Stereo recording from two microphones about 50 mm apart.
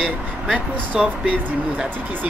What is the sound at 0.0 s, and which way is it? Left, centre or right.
Speech, right.